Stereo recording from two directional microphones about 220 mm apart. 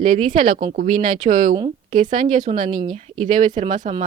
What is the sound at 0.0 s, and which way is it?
Speech, 35° right (ahead or behind).